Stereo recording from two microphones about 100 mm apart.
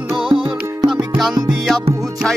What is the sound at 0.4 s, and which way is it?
Music, centre (ahead or behind).